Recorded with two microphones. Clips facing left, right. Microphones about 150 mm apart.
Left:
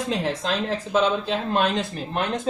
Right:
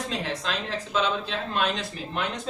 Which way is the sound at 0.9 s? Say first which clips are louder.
Left 5 dB; 50° left (ahead or behind).